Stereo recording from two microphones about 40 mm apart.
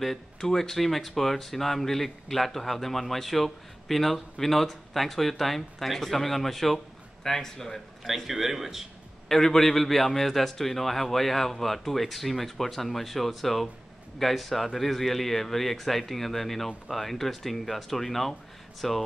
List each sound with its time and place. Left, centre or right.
0.0 s speech: centre
8.0 s speech: centre
9.3 s speech: centre